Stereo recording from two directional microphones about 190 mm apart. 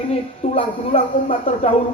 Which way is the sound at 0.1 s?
30° left (ahead or behind).